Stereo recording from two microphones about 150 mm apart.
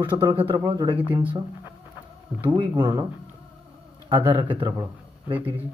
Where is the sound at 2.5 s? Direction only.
30° right (ahead or behind).